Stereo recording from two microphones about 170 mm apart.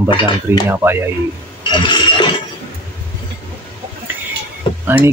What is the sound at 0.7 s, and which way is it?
Speech, 15° right (ahead or behind).